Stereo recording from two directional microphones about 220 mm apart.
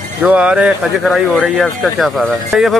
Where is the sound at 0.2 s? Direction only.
5° right (ahead or behind).